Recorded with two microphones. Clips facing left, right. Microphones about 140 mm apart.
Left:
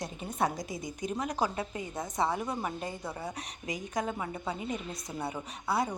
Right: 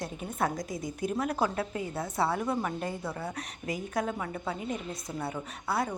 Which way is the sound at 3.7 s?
Centre (ahead or behind).